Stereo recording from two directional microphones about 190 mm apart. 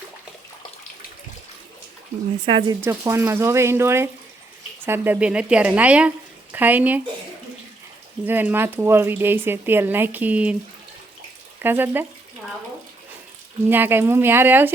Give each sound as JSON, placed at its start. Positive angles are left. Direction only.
{"t": 2.5, "sound": "speech", "side_deg": -25}
{"t": 2.8, "sound": "speech", "side_deg": -15}
{"t": 8.2, "sound": "speech", "side_deg": -10}
{"t": 11.6, "sound": "speech", "side_deg": -10}
{"t": 13.7, "sound": "speech", "side_deg": -10}